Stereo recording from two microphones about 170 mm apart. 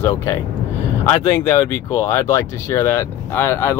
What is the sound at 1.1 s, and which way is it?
Speech, 20° left (ahead or behind).